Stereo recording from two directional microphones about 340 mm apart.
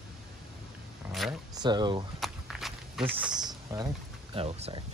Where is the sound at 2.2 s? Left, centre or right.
Centre.